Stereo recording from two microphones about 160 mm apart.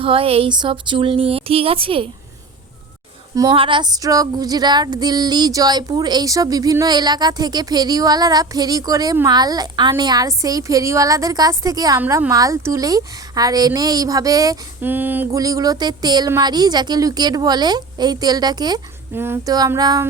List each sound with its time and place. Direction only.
0.0 s speech: 35° right (ahead or behind)
3.3 s female singing: 30° right (ahead or behind)
14.8 s a sound: 10° right (ahead or behind)
15.4 s female singing: 20° right (ahead or behind)
19.1 s female singing: 15° right (ahead or behind)